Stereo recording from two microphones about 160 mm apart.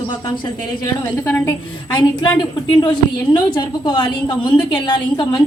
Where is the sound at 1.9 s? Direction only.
30° left (ahead or behind).